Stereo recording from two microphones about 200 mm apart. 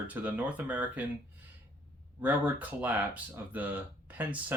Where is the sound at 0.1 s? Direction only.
10° right (ahead or behind).